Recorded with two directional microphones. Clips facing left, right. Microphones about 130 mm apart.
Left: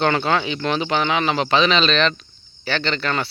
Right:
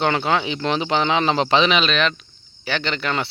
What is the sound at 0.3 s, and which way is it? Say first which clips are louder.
Speech: even; 20° right (ahead or behind).